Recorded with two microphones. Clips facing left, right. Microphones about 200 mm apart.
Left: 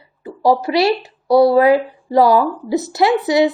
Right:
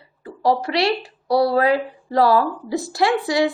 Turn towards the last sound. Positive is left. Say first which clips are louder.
# left 4 dB
turn(degrees=20)  # may be behind; listen again after turning